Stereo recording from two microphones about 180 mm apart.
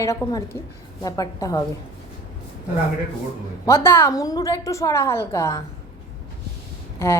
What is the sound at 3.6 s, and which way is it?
A woman's voice, 15° left (ahead or behind).